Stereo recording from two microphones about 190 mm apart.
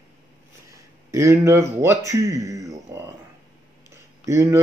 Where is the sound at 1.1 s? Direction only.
15° right (ahead or behind).